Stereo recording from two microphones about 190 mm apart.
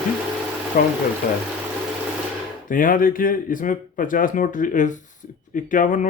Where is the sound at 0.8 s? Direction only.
50° left (ahead or behind).